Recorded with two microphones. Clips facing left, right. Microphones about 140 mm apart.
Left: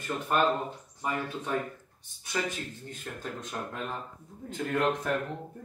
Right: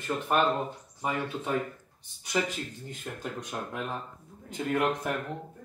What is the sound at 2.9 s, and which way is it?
Speech, 15° right (ahead or behind).